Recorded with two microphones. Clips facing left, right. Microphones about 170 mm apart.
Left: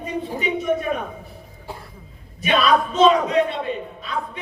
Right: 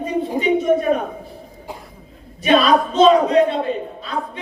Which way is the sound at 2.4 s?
35° right (ahead or behind).